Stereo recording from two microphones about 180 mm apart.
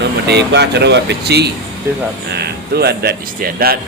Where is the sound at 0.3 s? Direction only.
70° right (ahead or behind).